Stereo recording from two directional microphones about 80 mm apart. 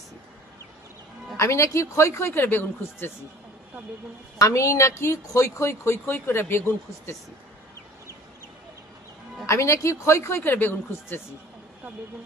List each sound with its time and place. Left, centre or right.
1.3 s a woman's voice: left
4.4 s a woman's voice: left
9.5 s a woman's voice: left